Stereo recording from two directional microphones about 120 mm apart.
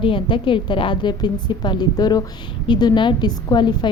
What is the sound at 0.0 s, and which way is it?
A woman's voice, 45° left (ahead or behind).